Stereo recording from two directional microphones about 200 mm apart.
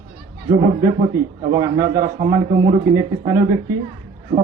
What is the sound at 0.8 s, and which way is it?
A man's voice, 15° right (ahead or behind).